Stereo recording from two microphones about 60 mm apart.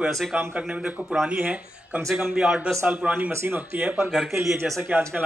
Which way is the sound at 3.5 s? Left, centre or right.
Right.